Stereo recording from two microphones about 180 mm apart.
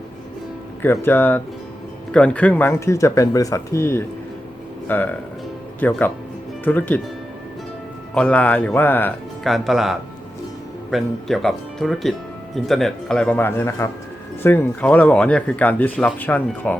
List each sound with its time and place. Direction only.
0.8 s speech: 10° left (ahead or behind)
8.1 s speech: 5° left (ahead or behind)
9.4 s speech: centre (ahead or behind)